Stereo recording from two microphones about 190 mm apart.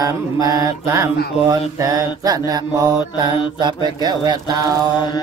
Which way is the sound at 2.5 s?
20° right (ahead or behind).